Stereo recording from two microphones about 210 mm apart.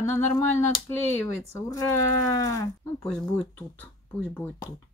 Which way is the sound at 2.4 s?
15° left (ahead or behind).